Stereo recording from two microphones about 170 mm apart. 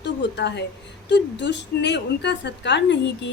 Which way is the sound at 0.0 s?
90° left.